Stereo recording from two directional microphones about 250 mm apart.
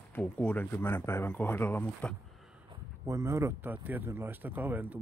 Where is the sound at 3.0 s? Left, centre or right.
Centre.